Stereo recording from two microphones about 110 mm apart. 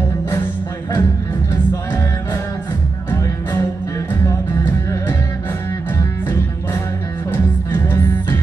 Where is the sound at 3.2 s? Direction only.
30° left (ahead or behind).